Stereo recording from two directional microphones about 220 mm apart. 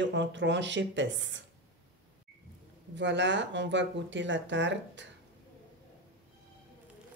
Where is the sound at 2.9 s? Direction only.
55° right (ahead or behind).